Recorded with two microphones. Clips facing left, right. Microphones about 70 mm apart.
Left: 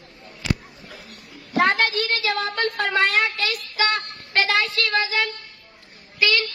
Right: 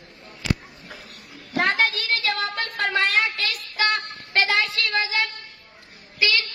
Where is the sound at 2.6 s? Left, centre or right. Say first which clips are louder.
Left 4 dB; centre.